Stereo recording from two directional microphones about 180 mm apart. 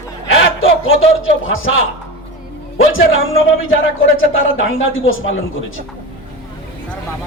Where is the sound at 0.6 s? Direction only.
90° left.